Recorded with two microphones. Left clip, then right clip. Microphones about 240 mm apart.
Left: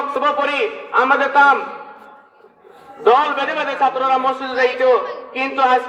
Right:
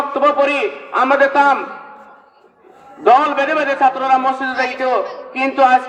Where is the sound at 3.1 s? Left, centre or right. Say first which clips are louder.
Right 2 dB; right.